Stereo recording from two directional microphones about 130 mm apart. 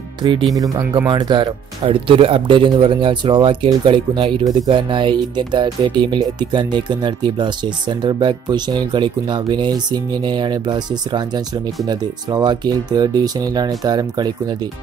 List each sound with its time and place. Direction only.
0.2 s speech: 40° right (ahead or behind)